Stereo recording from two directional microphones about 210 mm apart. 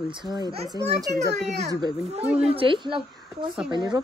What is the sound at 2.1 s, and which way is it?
Speech, 30° right (ahead or behind).